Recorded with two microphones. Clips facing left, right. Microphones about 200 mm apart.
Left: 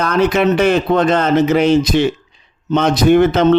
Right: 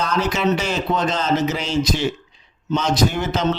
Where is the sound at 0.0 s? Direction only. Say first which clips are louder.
Left 7 dB; 60° left (ahead or behind).